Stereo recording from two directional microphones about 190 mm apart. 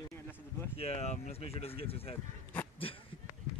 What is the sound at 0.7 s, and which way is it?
Speech, 35° left (ahead or behind).